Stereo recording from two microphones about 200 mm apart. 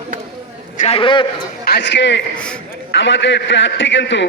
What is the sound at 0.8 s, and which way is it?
Speech, 30° left (ahead or behind).